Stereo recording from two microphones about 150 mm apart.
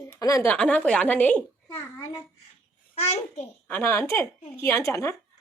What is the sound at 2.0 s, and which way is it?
Child singing, 20° left (ahead or behind).